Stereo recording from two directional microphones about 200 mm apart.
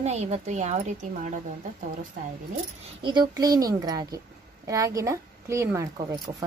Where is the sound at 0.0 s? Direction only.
35° right (ahead or behind).